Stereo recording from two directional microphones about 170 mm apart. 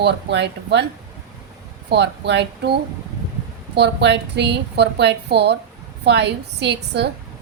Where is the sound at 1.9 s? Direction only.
90° right.